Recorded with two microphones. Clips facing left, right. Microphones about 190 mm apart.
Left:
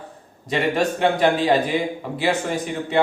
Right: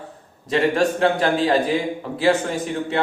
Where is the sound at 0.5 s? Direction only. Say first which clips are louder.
Right 2 dB; 5° left (ahead or behind).